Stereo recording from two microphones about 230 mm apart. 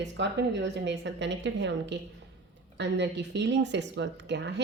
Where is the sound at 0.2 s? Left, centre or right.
Right.